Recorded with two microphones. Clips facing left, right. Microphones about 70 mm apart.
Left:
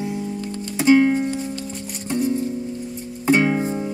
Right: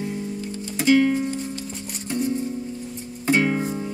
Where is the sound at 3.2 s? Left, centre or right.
Centre.